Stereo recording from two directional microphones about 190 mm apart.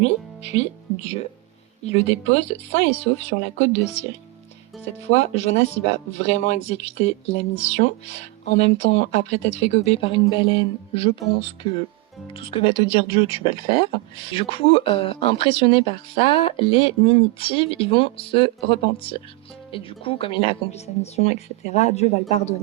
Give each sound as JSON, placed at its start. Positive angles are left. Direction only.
{"t": 0.0, "sound": "speech", "side_deg": 35}
{"t": 4.9, "sound": "speech", "side_deg": 35}